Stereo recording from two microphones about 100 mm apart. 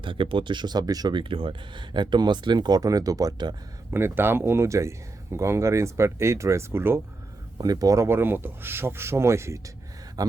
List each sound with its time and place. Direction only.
0.0 s speech: 60° right (ahead or behind); by 3.5 s 40° right (ahead or behind)
3.9 s speech: 20° right (ahead or behind)
7.6 s speech: 40° right (ahead or behind)
10.2 s a sound: 35° right (ahead or behind)